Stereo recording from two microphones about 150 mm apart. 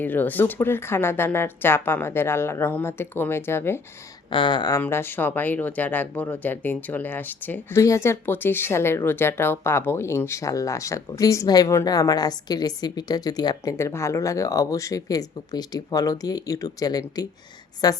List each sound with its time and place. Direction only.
0.0 s speech: 10° left (ahead or behind)
4.3 s speech: 30° left (ahead or behind)
4.8 s speech: 15° left (ahead or behind)